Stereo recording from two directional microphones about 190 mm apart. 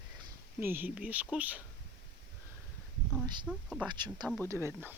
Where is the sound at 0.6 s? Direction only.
10° right (ahead or behind).